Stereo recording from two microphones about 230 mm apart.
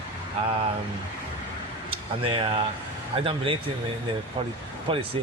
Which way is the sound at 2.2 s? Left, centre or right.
Right.